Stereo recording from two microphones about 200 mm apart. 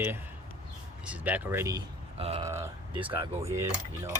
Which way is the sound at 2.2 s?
30° right (ahead or behind).